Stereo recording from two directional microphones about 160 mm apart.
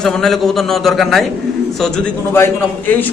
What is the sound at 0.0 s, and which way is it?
A man's voice, 5° left (ahead or behind).